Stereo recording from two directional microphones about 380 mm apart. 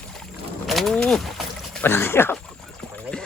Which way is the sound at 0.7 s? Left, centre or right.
Centre.